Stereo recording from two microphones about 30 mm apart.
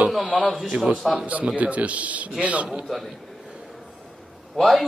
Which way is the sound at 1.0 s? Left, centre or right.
Centre.